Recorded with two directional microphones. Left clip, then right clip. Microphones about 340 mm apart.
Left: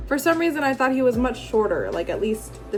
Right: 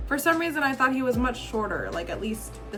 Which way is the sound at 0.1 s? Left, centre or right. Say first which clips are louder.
Left 3 dB; centre.